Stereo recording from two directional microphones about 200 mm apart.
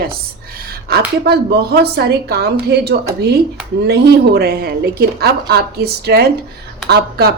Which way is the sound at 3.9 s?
55° right (ahead or behind).